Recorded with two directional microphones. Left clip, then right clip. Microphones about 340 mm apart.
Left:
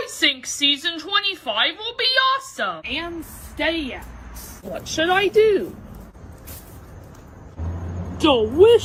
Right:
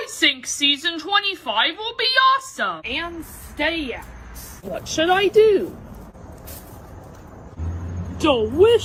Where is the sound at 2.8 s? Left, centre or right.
Centre.